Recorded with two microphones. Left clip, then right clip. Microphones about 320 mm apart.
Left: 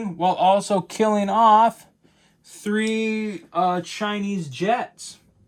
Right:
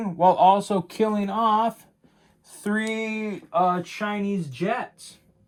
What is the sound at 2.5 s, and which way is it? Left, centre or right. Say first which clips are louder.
Speech: left 3 dB; centre.